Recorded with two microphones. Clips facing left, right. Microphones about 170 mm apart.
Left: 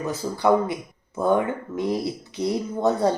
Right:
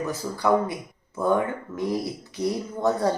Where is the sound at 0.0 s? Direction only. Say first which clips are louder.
Left 3 dB; 25° left (ahead or behind).